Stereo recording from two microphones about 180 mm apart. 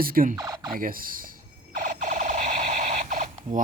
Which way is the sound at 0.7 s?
50° right (ahead or behind).